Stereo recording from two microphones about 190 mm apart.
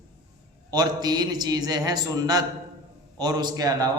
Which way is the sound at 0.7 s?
20° right (ahead or behind).